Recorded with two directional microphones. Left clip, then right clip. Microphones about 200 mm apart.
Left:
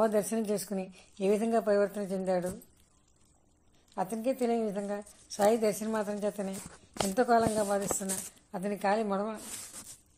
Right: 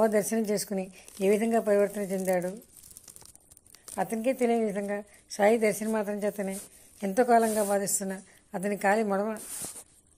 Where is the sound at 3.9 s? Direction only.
10° right (ahead or behind).